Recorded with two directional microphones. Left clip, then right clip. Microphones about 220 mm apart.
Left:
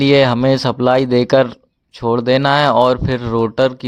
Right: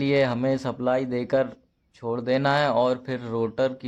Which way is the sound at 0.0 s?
35° left (ahead or behind).